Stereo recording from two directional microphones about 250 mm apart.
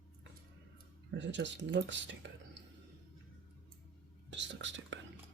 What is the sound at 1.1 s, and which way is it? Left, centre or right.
Speech, right.